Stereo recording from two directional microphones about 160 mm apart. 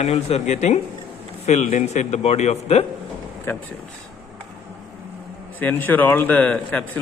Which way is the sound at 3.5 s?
15° left (ahead or behind).